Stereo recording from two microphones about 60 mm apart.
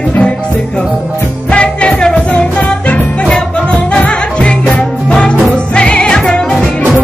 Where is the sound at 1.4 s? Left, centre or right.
Centre.